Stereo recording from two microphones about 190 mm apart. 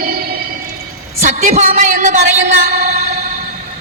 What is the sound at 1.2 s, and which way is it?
A woman's voice, 40° right (ahead or behind).